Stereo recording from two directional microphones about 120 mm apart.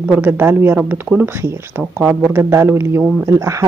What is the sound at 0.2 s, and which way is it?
Speech, 20° right (ahead or behind).